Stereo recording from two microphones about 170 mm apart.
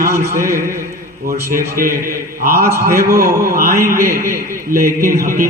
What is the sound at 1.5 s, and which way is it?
Speech, 55° right (ahead or behind).